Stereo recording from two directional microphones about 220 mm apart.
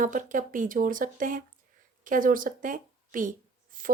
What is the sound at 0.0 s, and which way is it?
A woman's voice, 35° right (ahead or behind).